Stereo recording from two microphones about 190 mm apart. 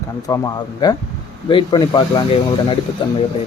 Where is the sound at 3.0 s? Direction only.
25° left (ahead or behind).